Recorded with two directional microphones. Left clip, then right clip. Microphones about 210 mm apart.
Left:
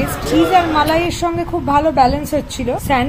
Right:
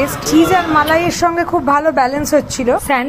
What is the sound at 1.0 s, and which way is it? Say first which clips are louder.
Speech: right 3 dB; 45° right (ahead or behind).